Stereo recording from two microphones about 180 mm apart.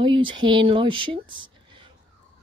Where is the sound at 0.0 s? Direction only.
25° right (ahead or behind).